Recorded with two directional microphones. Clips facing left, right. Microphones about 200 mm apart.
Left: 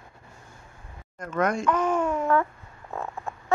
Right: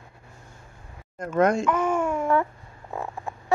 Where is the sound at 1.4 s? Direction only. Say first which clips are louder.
Right 5 dB; 25° right (ahead or behind).